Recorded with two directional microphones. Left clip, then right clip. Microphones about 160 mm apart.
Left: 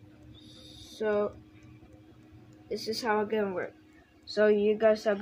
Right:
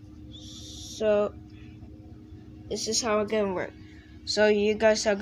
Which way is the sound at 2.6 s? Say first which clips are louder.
Right 3 dB; centre (ahead or behind).